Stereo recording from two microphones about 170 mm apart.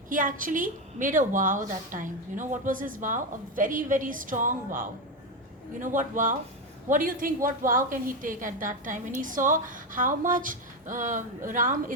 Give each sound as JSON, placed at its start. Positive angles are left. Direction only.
{"t": 0.1, "sound": "a woman's voice", "side_deg": -50}